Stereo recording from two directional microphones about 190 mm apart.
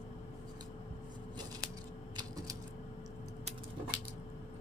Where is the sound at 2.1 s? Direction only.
20° right (ahead or behind).